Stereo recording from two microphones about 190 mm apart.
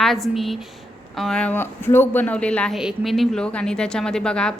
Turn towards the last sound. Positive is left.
turn(degrees=5)  # may be behind; listen again after turning